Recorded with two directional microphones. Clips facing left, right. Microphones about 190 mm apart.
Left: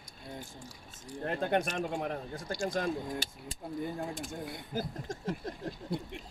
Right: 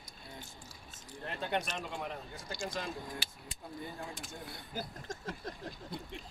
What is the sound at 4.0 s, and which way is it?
Speech, 45° left (ahead or behind).